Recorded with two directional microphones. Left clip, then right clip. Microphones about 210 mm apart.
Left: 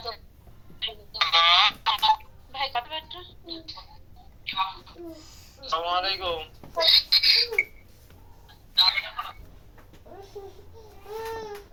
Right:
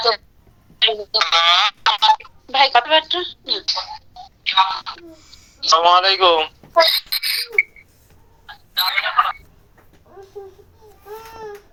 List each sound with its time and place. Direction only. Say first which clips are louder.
0.8 s speech: right 11 dB; 45° right (ahead or behind)
5.6 s a sound: right 14 dB; 45° right (ahead or behind)
8.4 s telephone: right 1 dB; 40° right (ahead or behind)